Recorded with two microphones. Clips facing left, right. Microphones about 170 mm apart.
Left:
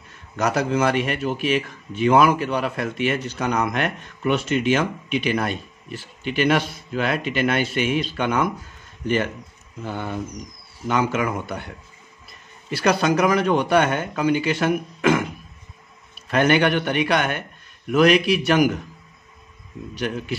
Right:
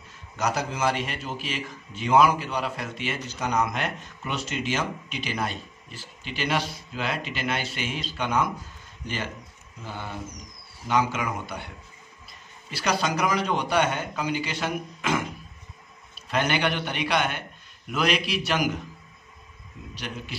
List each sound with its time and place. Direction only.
0.4 s a man's voice: 60° left (ahead or behind)
16.3 s speech: 55° left (ahead or behind)